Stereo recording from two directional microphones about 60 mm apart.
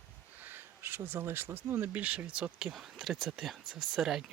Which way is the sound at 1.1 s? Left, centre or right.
Right.